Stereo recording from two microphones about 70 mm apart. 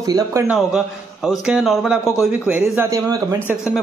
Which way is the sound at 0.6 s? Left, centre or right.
Centre.